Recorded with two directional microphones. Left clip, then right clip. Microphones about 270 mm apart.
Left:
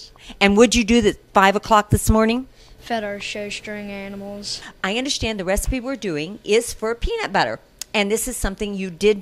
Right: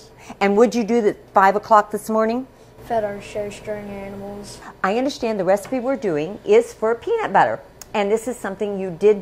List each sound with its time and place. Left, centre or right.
0.4 s a woman's voice: left
1.3 s a woman's voice: centre
2.0 s a woman's voice: left
2.9 s speech: left
4.8 s a woman's voice: centre
5.7 s a woman's voice: left